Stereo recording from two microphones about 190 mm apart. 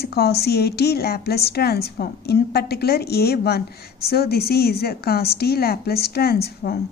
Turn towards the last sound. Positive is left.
turn(degrees=55)  # may be behind; listen again after turning